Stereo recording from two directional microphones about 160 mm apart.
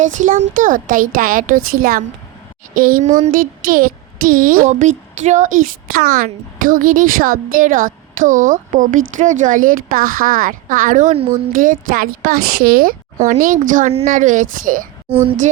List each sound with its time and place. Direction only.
0.0 s a child's voice: 50° right (ahead or behind)
3.1 s a child's voice: 45° right (ahead or behind)